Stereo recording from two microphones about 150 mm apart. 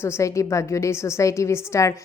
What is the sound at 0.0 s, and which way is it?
A woman's voice, 20° left (ahead or behind).